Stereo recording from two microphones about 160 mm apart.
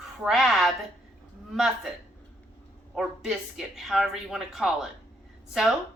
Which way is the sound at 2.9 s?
Centre (ahead or behind).